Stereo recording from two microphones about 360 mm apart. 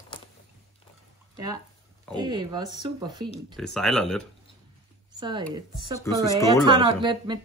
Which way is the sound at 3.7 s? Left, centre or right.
Centre.